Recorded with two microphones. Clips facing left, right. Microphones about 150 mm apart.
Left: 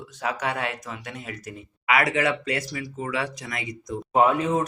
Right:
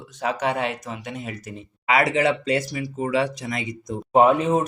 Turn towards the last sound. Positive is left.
turn(degrees=-25)  # may be behind; listen again after turning